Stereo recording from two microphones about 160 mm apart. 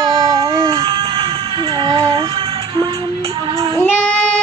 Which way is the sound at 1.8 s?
30° right (ahead or behind).